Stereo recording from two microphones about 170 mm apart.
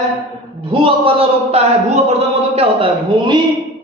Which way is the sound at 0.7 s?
30° right (ahead or behind).